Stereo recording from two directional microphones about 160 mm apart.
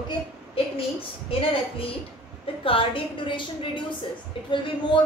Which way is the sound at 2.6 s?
35° left (ahead or behind).